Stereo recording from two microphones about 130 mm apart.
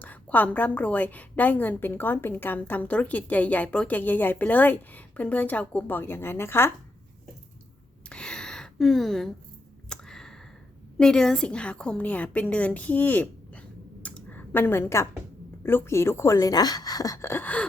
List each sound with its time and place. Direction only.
0.0 s a woman's voice: 10° left (ahead or behind)
8.1 s a sound: 5° left (ahead or behind)
10.9 s a woman's voice: 5° left (ahead or behind)